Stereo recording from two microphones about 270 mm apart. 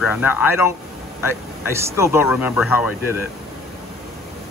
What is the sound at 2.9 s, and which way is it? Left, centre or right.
Speech, left.